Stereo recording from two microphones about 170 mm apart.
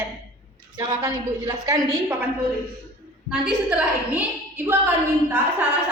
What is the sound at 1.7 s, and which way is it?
Speech, 20° right (ahead or behind).